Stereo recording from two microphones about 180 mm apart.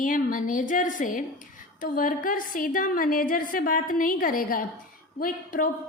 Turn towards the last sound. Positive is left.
turn(degrees=50)  # may be behind; listen again after turning